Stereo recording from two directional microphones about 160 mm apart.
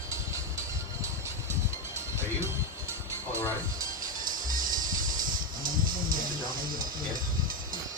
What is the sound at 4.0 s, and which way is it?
Music, 60° right (ahead or behind).